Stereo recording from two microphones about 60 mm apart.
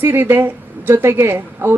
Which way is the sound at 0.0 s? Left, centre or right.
Right.